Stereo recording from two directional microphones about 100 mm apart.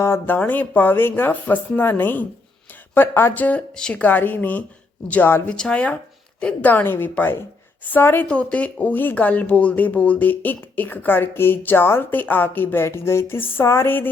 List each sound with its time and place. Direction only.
0.0 s speech: 20° left (ahead or behind)